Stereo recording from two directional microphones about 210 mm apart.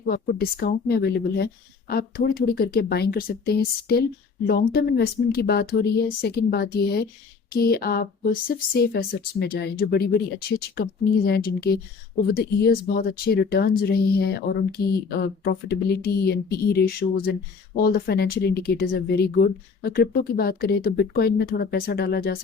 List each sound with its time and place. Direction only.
0.1 s speech: 45° left (ahead or behind)